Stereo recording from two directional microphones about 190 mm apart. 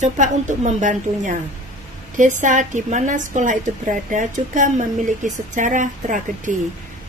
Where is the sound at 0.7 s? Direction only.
40° right (ahead or behind).